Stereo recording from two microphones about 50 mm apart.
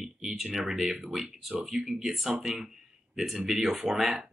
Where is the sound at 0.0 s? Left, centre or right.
Centre.